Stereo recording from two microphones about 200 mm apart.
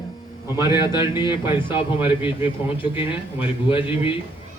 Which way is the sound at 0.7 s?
20° left (ahead or behind).